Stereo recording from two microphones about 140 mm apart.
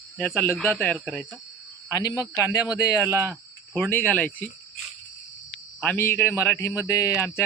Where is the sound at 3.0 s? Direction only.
20° right (ahead or behind).